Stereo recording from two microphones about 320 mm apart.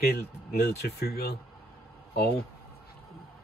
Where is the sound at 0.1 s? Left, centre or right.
Left.